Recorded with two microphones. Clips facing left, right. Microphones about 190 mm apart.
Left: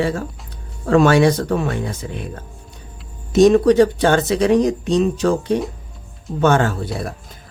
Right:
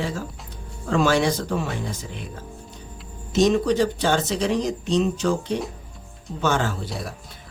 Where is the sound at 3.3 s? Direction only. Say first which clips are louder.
Left 8 dB; 55° left (ahead or behind).